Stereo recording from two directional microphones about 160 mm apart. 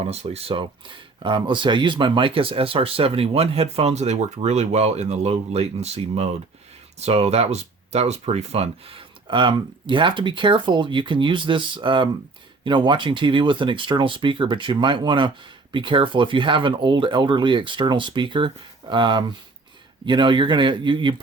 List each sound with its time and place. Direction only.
0.0 s speech: 40° right (ahead or behind)